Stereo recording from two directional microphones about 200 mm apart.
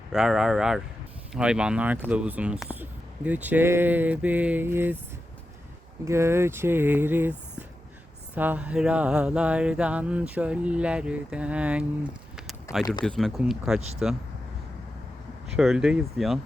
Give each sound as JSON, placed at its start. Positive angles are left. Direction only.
{"t": 0.1, "sound": "mantra", "side_deg": 0}
{"t": 2.0, "sound": "speech", "side_deg": -10}
{"t": 6.1, "sound": "speech", "side_deg": -15}
{"t": 8.4, "sound": "mantra", "side_deg": -10}
{"t": 12.7, "sound": "speech", "side_deg": 15}
{"t": 13.1, "sound": "mantra", "side_deg": 0}
{"t": 15.5, "sound": "mantra", "side_deg": -5}